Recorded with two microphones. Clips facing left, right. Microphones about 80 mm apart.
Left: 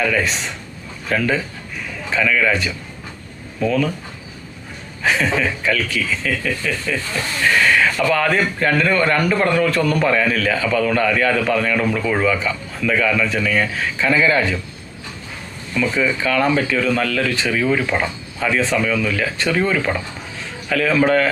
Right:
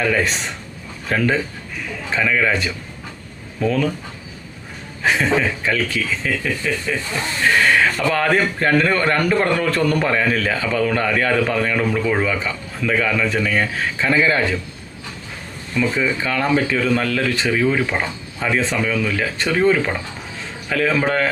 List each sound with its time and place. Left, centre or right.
0.0 s speech: right
5.6 s speech: right
10.0 s speech: right
16.2 s speech: right
17.4 s speech: centre
18.3 s speech: right